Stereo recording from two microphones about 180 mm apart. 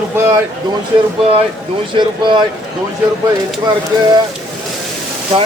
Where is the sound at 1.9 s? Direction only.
25° right (ahead or behind).